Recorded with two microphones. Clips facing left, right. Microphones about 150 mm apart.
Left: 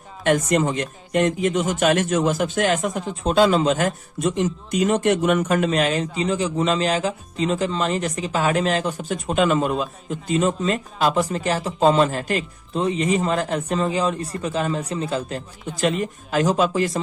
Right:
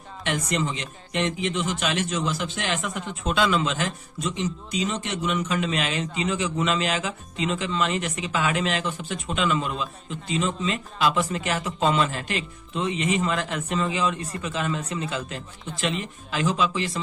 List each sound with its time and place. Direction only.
0.3 s speech: 50° left (ahead or behind)